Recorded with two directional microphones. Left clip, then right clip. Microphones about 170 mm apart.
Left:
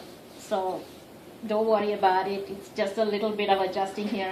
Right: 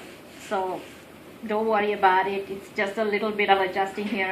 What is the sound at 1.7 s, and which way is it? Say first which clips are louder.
A woman's voice: right 4 dB; 30° left (ahead or behind).